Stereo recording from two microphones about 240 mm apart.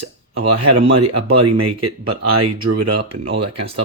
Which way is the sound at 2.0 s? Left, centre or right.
Right.